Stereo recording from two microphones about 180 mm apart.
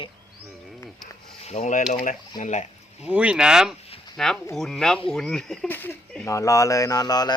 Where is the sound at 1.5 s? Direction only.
40° left (ahead or behind).